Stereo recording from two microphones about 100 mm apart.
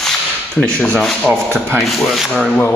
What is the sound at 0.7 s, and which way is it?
Speech, 10° left (ahead or behind).